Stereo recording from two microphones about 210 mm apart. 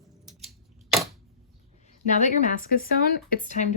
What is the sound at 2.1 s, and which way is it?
Speech, 40° left (ahead or behind).